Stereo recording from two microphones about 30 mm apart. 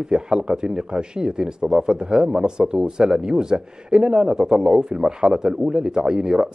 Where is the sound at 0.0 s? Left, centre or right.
Right.